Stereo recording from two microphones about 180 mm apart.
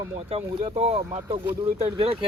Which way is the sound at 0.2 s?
30° right (ahead or behind).